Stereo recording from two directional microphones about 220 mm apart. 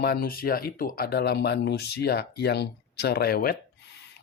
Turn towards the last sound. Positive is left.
turn(degrees=45)  # may be behind; listen again after turning